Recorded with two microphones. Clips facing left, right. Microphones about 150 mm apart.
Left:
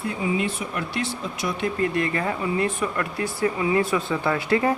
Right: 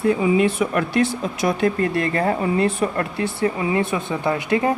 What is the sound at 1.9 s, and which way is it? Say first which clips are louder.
Speech: right 4 dB; 35° right (ahead or behind).